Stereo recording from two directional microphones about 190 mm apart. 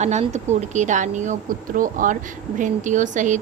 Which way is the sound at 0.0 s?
35° right (ahead or behind).